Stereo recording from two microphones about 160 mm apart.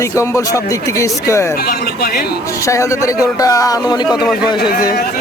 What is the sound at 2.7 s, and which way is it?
Speech, 20° left (ahead or behind).